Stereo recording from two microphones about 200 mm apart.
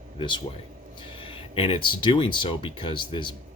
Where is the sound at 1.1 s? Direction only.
25° left (ahead or behind).